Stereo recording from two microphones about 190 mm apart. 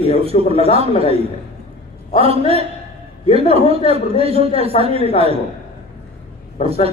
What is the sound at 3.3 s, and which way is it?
A man's voice, 30° right (ahead or behind).